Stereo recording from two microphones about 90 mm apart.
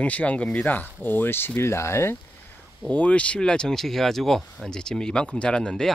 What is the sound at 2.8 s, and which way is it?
Speech, 15° left (ahead or behind).